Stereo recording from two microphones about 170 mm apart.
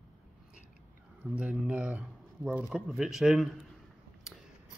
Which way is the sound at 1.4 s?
5° right (ahead or behind).